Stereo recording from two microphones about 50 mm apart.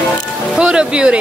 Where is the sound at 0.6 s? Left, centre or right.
Centre.